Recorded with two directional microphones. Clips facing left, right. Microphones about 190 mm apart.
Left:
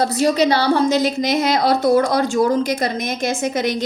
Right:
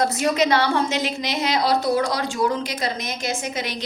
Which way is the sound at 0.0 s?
35° left (ahead or behind).